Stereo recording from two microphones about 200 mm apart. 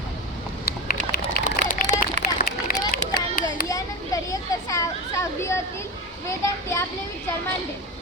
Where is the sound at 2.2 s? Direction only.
45° left (ahead or behind).